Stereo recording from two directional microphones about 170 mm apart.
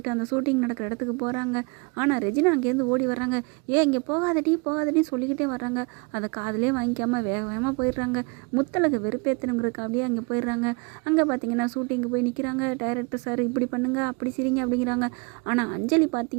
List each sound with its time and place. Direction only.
0.0 s speech: 15° right (ahead or behind)